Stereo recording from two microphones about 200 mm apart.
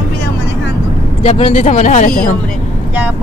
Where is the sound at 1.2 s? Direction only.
30° left (ahead or behind).